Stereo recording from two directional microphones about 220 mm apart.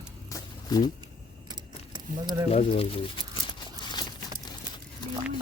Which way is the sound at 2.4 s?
25° left (ahead or behind).